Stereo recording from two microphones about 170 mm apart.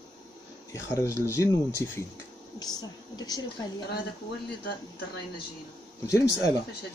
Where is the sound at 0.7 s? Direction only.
15° left (ahead or behind).